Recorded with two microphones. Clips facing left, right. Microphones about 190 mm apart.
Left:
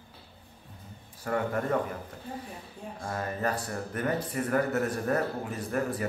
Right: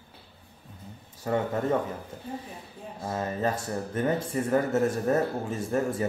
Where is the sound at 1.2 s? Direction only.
20° right (ahead or behind).